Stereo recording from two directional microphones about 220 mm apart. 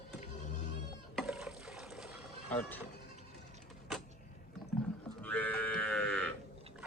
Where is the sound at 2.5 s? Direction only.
10° left (ahead or behind).